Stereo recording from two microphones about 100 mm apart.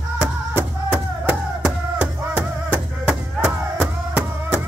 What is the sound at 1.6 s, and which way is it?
Music, 15° right (ahead or behind).